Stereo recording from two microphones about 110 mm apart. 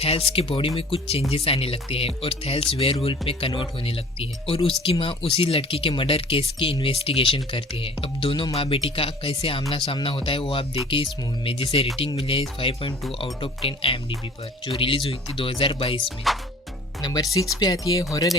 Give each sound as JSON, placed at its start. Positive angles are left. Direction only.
{"t": 0.0, "sound": "speech", "side_deg": 60}
{"t": 16.0, "sound": "speech", "side_deg": 0}
{"t": 17.0, "sound": "speech", "side_deg": 40}